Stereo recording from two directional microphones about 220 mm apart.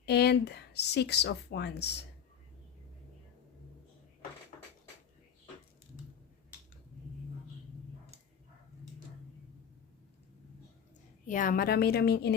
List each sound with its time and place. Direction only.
0.0 s speech: 50° left (ahead or behind)
11.3 s a woman's voice: 40° left (ahead or behind)